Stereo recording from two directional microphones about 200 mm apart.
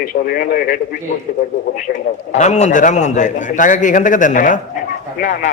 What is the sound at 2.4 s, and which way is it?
A man's voice, 35° left (ahead or behind).